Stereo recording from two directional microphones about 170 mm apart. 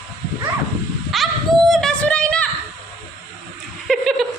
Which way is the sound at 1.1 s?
Centre (ahead or behind).